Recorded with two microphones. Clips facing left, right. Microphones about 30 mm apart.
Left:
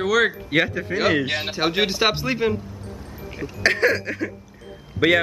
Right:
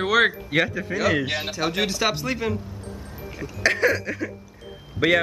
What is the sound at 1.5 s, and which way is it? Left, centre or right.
A man's voice, left.